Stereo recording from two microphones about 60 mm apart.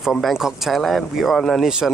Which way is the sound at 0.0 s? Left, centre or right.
Centre.